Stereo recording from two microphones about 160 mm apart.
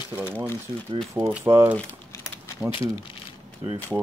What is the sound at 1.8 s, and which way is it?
Typing, 20° left (ahead or behind).